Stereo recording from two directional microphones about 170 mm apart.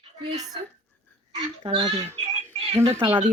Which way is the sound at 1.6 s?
30° right (ahead or behind).